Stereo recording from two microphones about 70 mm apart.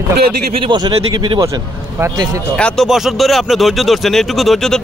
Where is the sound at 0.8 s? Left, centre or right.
Right.